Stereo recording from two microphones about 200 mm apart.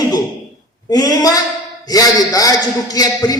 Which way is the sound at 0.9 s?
20° left (ahead or behind).